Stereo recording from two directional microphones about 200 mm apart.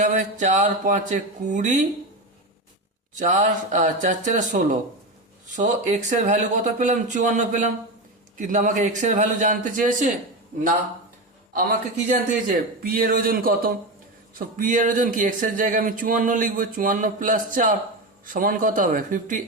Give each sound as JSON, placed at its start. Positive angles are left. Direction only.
{"t": 0.0, "sound": "speech", "side_deg": -40}
{"t": 3.2, "sound": "speech", "side_deg": -40}
{"t": 12.0, "sound": "a man's voice", "side_deg": -45}